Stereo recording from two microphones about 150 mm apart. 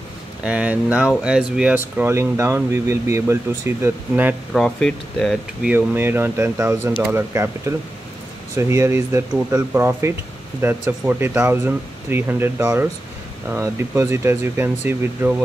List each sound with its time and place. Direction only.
0.4 s speech: 5° right (ahead or behind)
4.6 s speech: 5° left (ahead or behind)
5.7 s speech: 15° right (ahead or behind)